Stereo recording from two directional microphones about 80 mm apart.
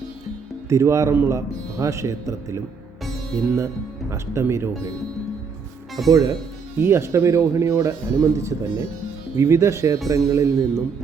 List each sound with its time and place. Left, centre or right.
0.7 s speech: right
6.1 s speech: right
6.7 s speech: right